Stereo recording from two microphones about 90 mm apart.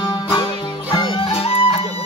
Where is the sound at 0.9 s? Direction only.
65° left (ahead or behind); by 1.8 s 90° left.